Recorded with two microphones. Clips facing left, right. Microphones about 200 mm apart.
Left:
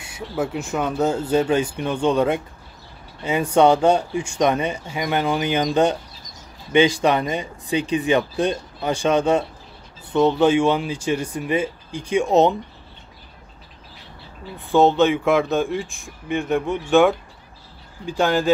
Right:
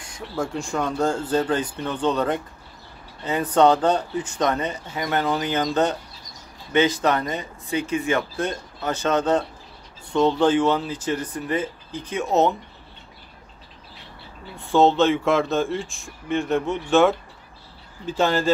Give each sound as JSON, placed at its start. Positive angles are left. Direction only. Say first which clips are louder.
{"t": 0.0, "sound": "speech", "louder": "left 3 dB", "side_deg": 5}
{"t": 14.8, "sound": "speech", "louder": "left 1 dB", "side_deg": 15}
{"t": 15.1, "sound": "speech", "louder": "left 2 dB", "side_deg": 0}
{"t": 15.8, "sound": "speech", "louder": "left 2 dB", "side_deg": 15}
{"t": 18.0, "sound": "speech", "louder": "left 1 dB", "side_deg": 0}